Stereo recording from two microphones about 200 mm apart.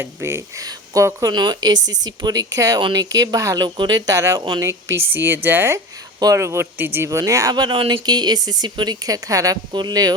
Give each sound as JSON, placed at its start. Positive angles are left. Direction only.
{"t": 0.0, "sound": "speech", "side_deg": -10}